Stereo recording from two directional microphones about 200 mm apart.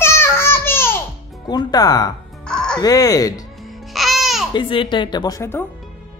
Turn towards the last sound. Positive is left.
turn(degrees=15)  # may be behind; listen again after turning